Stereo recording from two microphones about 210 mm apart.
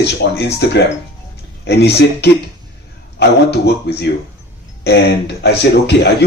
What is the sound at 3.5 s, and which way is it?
Speech, 50° left (ahead or behind).